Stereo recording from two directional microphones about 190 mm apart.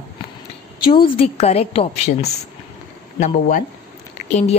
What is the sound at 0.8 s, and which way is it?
A woman's voice, 25° left (ahead or behind).